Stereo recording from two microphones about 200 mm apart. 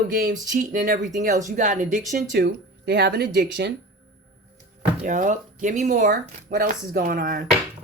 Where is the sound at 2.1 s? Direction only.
55° right (ahead or behind).